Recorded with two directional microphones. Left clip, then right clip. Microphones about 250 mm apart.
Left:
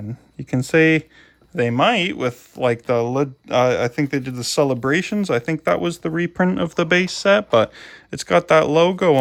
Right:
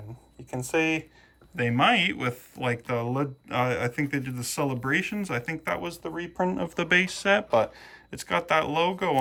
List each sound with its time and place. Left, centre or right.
0.7 s speech: left
1.5 s speech: centre
6.0 s speech: left
6.7 s speech: centre